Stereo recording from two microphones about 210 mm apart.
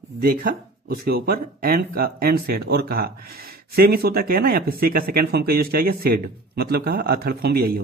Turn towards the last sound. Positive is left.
turn(degrees=-45)  # may be behind; listen again after turning